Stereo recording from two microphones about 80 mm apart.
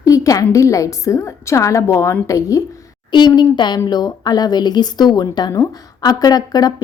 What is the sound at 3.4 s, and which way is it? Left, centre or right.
Speech, left.